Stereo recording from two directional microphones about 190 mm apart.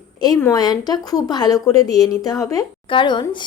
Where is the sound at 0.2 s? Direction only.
15° left (ahead or behind).